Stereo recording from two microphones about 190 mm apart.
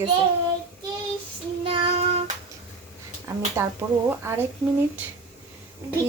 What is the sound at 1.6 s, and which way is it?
Child singing, 30° right (ahead or behind).